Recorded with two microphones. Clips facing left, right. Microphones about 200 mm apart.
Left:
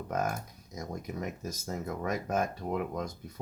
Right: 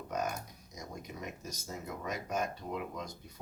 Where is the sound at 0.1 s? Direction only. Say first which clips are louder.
Left 3 dB; 50° left (ahead or behind).